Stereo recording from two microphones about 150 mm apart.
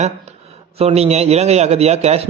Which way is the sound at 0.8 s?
45° right (ahead or behind).